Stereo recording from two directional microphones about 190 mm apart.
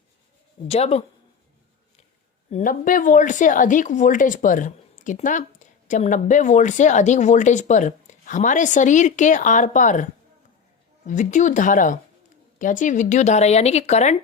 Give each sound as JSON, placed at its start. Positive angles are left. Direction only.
{"t": 0.7, "sound": "a woman's voice", "side_deg": 30}
{"t": 2.5, "sound": "a woman's voice", "side_deg": 40}